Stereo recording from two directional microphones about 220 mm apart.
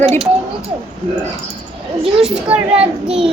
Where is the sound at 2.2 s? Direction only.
5° right (ahead or behind).